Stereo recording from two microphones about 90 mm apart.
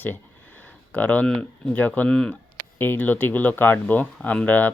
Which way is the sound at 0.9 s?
15° left (ahead or behind).